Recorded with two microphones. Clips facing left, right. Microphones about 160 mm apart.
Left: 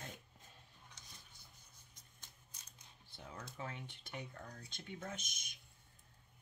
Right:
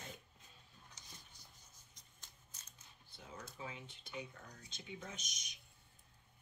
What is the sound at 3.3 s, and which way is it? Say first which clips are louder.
Speech: left 1 dB; 60° left (ahead or behind).